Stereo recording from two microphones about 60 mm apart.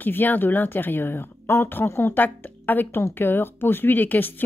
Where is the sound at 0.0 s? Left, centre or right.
Left.